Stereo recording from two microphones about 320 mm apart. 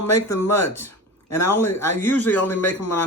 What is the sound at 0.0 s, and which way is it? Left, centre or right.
Speech, left.